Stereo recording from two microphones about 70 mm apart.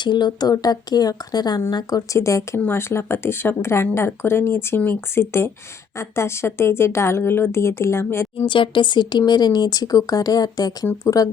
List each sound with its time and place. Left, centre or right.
0.0 s speech: left
1.7 s speech: left
2.1 s speech: left
2.6 s speech: left
8.9 s speech: left